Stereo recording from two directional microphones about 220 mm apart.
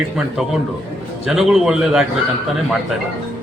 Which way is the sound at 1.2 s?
Centre (ahead or behind).